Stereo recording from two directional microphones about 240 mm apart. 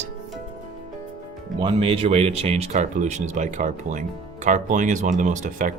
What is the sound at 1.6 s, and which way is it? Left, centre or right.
A woman's voice, right.